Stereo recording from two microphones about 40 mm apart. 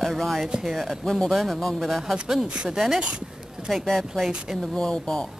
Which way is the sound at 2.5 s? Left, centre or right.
Right.